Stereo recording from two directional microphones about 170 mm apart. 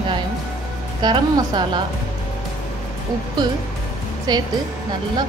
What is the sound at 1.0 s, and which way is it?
Speech, 25° right (ahead or behind).